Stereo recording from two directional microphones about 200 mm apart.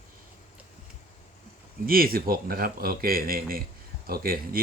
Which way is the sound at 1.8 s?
45° right (ahead or behind).